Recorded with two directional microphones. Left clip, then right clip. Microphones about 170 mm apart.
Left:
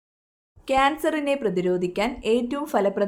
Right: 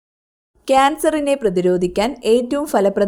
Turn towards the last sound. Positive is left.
turn(degrees=-35)  # may be behind; listen again after turning